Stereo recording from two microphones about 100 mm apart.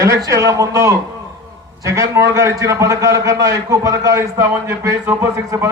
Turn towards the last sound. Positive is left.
turn(degrees=-30)  # may be behind; listen again after turning